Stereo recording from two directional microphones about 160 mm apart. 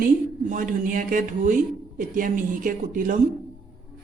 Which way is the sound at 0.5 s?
55° right (ahead or behind).